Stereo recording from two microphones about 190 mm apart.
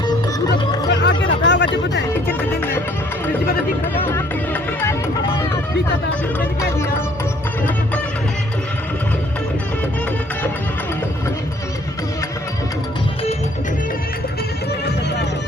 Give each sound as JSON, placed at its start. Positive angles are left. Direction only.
{"t": 0.5, "sound": "chatter", "side_deg": 65}